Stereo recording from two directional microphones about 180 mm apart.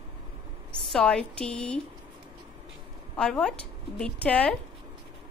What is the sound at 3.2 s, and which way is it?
A woman's voice, 5° left (ahead or behind).